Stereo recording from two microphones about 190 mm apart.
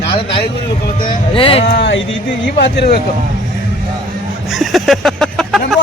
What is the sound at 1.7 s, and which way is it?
Speech, 65° left (ahead or behind).